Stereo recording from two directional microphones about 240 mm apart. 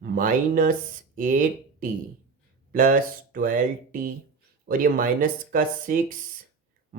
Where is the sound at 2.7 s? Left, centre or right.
Right.